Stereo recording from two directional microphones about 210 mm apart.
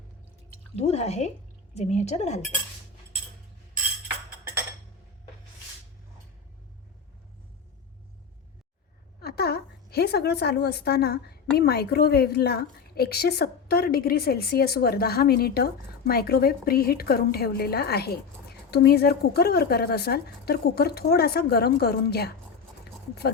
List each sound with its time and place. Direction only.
0.8 s a woman's voice: 30° left (ahead or behind)
9.2 s a woman's voice: 50° left (ahead or behind)
22.8 s a sound: 50° left (ahead or behind)